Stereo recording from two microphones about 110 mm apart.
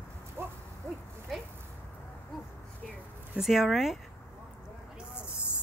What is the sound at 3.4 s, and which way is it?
Speech, centre (ahead or behind).